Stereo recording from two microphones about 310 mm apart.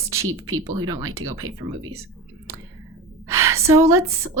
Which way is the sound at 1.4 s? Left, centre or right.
Right.